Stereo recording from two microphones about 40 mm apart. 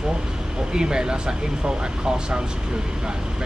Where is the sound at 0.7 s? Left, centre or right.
Centre.